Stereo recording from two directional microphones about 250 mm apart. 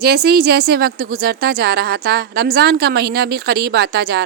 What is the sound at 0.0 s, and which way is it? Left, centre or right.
A woman's voice, right.